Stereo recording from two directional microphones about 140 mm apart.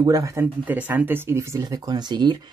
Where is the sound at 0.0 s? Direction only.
25° right (ahead or behind).